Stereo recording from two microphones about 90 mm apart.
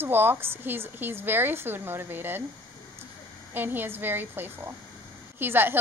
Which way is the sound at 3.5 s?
20° right (ahead or behind).